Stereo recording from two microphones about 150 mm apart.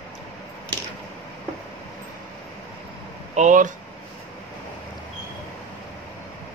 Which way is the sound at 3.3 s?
55° right (ahead or behind).